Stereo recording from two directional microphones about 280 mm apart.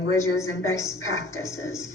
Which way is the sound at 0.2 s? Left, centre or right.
Centre.